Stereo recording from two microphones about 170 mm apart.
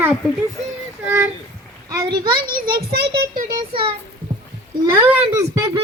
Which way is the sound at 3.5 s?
25° right (ahead or behind).